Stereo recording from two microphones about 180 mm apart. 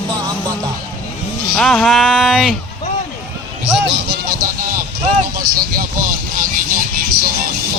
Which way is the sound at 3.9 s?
70° right (ahead or behind).